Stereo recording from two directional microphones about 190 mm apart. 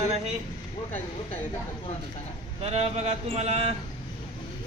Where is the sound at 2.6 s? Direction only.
35° right (ahead or behind).